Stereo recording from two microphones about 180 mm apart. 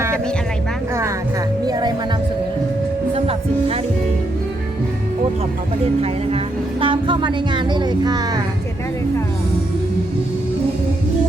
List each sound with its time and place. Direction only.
1.6 s music: 20° right (ahead or behind)
3.2 s music: 35° right (ahead or behind)
5.8 s speech: 35° right (ahead or behind)